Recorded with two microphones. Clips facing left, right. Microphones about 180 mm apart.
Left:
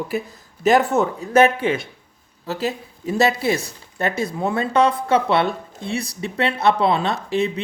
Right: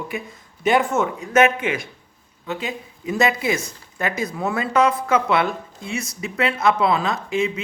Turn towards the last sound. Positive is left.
turn(degrees=35)  # may be behind; listen again after turning